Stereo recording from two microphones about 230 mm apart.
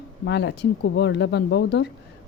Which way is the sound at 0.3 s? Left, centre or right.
Left.